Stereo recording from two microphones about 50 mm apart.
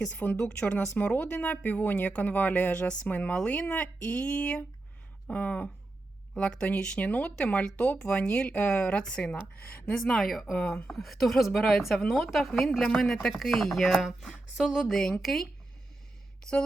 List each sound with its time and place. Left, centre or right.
0.2 s speech: left
0.4 s speech: centre
2.8 s a woman's voice: centre
3.1 s speech: left
6.3 s a woman's voice: centre; by 9.9 s left
10.2 s a woman's voice: centre
10.5 s speech: left
10.9 s a woman's voice: centre